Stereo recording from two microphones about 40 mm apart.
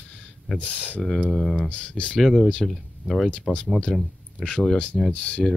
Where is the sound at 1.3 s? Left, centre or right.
Centre.